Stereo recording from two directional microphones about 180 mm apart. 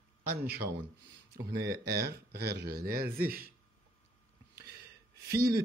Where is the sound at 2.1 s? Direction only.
65° right (ahead or behind).